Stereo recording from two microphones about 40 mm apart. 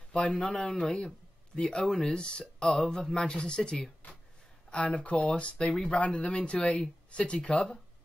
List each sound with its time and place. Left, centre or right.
0.3 s speech: centre
4.7 s speech: left